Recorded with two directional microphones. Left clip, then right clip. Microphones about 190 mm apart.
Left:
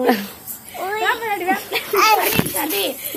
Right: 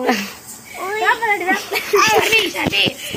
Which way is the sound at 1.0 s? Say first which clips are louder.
Right 4 dB; 25° right (ahead or behind).